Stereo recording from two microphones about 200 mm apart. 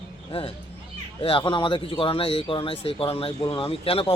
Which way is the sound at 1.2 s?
25° left (ahead or behind).